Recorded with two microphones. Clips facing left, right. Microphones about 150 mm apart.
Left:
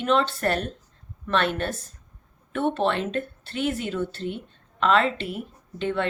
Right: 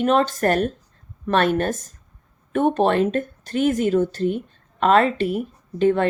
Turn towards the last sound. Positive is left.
turn(degrees=-45)  # may be behind; listen again after turning